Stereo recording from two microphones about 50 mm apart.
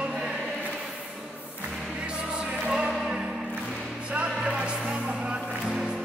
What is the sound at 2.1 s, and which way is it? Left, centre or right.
Music, centre.